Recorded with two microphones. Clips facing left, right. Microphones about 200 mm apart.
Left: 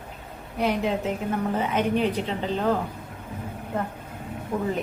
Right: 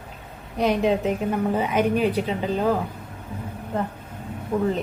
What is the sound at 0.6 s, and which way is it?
A woman's voice, 15° right (ahead or behind).